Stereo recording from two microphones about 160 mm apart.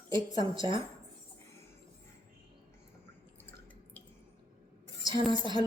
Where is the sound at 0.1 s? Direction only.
30° right (ahead or behind).